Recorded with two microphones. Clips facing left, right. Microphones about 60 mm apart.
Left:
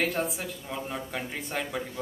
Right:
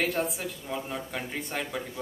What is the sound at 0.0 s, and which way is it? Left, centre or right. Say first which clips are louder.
Speech: even; centre.